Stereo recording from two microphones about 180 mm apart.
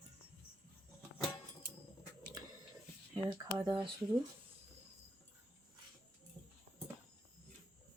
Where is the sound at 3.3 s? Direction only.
20° right (ahead or behind).